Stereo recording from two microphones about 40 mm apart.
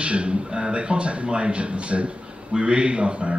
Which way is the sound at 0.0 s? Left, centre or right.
Right.